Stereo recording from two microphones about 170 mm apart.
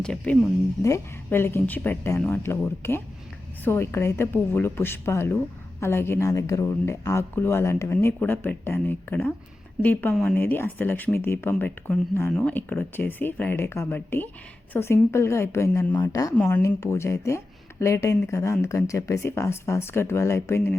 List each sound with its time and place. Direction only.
0.0 s speech: 5° left (ahead or behind)
0.8 s a woman's voice: 15° left (ahead or behind)